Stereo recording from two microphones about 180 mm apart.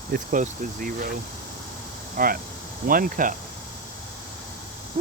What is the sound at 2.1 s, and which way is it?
Speech, 50° right (ahead or behind).